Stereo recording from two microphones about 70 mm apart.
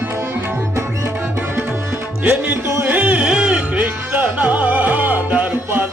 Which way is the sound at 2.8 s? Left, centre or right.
Right.